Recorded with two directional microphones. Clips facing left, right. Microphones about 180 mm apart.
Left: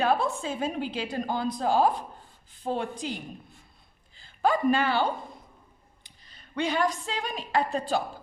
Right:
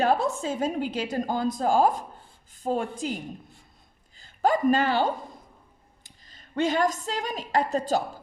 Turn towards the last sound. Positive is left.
turn(degrees=-40)  # may be behind; listen again after turning